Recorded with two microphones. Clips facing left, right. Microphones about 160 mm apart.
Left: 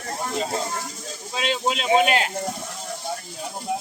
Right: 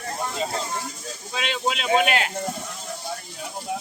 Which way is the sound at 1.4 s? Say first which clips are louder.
Left 2 dB; 35° left (ahead or behind).